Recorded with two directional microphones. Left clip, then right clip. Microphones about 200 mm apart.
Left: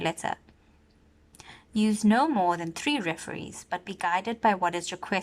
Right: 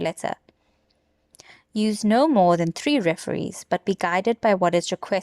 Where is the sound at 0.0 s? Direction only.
30° right (ahead or behind).